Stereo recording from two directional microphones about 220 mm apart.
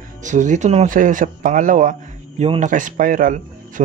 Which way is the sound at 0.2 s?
35° right (ahead or behind).